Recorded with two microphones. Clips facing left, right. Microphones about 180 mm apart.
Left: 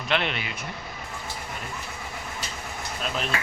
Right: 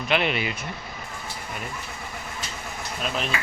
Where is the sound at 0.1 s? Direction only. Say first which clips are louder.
Right 3 dB; 10° right (ahead or behind).